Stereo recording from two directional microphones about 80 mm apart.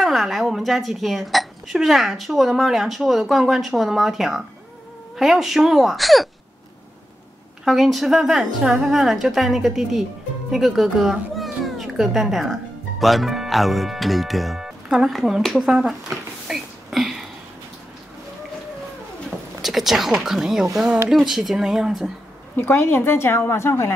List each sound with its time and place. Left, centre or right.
0.0 s speech: centre
7.6 s speech: centre
19.6 s speech: centre
22.6 s a woman's voice: left